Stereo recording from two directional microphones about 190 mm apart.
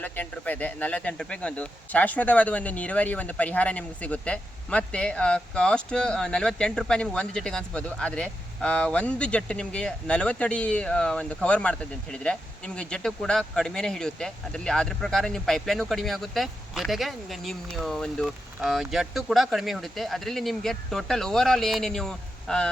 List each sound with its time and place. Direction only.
0.0 s speech: 10° left (ahead or behind)